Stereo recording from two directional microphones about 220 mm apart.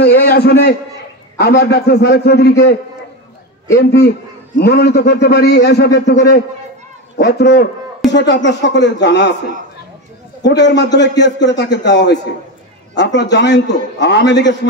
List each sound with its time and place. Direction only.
0.0 s a man's voice: 50° left (ahead or behind)
10.4 s a man's voice: 50° left (ahead or behind)